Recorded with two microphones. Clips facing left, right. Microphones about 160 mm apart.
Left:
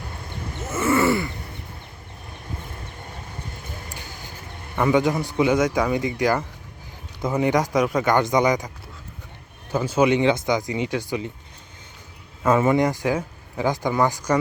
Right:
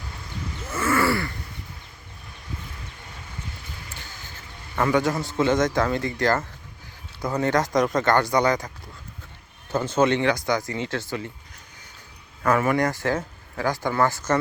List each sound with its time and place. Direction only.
0.7 s groan: 25° left (ahead or behind)
4.8 s speech: 15° left (ahead or behind)
9.7 s speech: 10° left (ahead or behind)
12.4 s speech: 20° left (ahead or behind)